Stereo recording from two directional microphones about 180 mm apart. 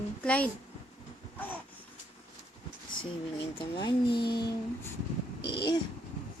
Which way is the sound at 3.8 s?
25° left (ahead or behind).